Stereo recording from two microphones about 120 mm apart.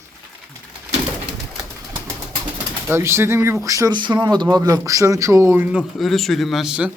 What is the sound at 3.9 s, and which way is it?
Speech, 40° right (ahead or behind).